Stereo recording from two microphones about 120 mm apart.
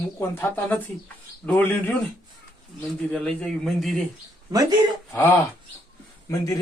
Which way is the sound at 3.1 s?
5° left (ahead or behind).